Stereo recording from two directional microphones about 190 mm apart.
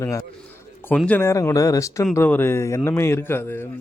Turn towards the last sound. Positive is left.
turn(degrees=10)  # may be behind; listen again after turning